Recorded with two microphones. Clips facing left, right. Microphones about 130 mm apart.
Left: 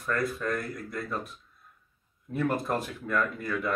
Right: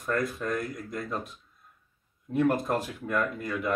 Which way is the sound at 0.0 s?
15° right (ahead or behind).